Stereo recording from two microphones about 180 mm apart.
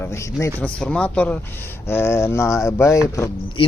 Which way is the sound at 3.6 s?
30° left (ahead or behind).